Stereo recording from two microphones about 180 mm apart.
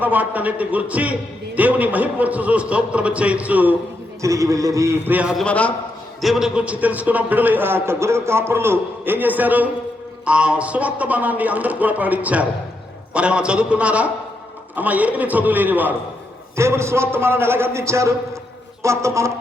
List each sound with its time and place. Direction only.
0.0 s a man's voice: 10° right (ahead or behind)